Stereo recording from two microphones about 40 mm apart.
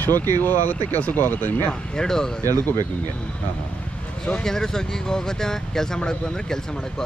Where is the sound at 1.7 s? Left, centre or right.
Centre.